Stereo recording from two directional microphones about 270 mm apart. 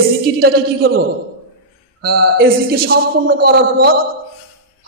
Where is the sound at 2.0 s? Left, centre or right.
Right.